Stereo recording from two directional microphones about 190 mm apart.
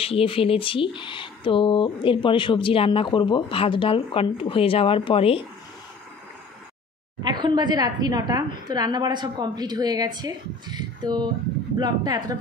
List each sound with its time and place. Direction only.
0.0 s speech: 30° left (ahead or behind)
7.2 s a woman's voice: 25° right (ahead or behind)